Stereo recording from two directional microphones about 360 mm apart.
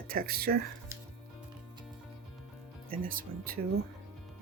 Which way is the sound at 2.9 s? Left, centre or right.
Right.